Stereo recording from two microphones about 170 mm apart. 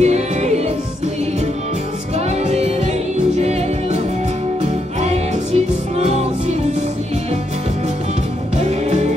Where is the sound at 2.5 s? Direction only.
40° right (ahead or behind).